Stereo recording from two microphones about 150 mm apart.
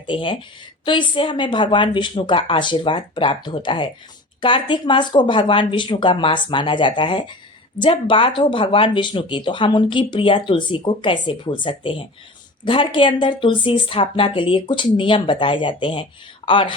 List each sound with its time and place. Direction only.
0.0 s speech: 35° left (ahead or behind)